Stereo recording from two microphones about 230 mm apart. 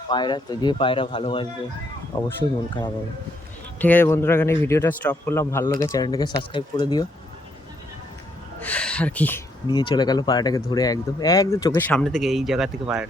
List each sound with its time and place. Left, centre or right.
0.1 s speech: centre
2.1 s speech: centre
3.8 s speech: centre
8.6 s a sound: centre
9.6 s speech: centre